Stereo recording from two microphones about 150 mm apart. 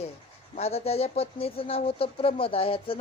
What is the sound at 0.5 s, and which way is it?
A woman's voice, 45° left (ahead or behind).